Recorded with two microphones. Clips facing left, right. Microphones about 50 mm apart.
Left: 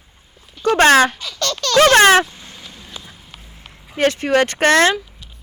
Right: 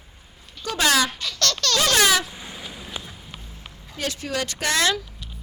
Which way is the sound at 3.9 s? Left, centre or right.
Left.